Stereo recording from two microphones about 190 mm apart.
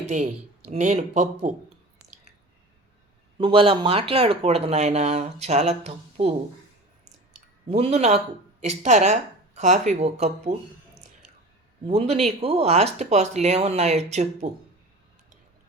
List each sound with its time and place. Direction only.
0.1 s speech: 35° right (ahead or behind)
3.3 s speech: 25° right (ahead or behind)
7.7 s speech: 35° right (ahead or behind)
11.9 s speech: 35° right (ahead or behind)